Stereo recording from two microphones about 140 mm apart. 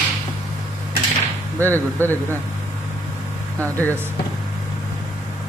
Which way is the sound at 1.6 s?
15° left (ahead or behind).